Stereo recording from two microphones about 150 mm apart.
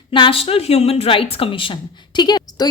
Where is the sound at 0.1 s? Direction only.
35° left (ahead or behind).